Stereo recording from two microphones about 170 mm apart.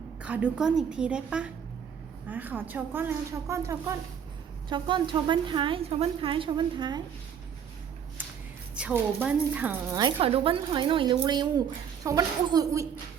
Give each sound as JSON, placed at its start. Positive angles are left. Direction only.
{"t": 0.2, "sound": "a woman's voice", "side_deg": -5}
{"t": 4.7, "sound": "a woman's voice", "side_deg": -30}
{"t": 8.7, "sound": "a woman's voice", "side_deg": -10}
{"t": 9.9, "sound": "a woman's voice", "side_deg": -30}